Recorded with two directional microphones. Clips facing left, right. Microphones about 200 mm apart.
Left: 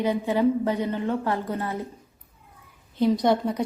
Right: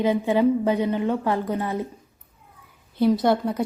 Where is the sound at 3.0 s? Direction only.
5° right (ahead or behind).